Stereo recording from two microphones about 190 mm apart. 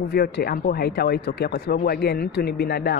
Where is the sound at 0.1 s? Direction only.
55° left (ahead or behind).